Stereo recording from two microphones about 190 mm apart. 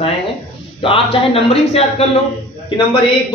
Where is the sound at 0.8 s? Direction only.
30° left (ahead or behind).